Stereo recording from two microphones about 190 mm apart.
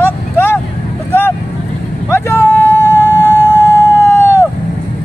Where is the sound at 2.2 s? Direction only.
10° left (ahead or behind).